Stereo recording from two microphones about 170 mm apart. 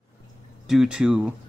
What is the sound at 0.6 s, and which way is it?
Speech, 5° right (ahead or behind).